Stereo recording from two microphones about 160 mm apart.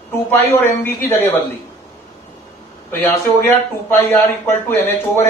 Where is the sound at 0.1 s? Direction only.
15° left (ahead or behind).